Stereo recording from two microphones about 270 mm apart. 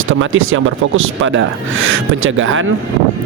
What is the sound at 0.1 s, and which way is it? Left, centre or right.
A man's voice, right.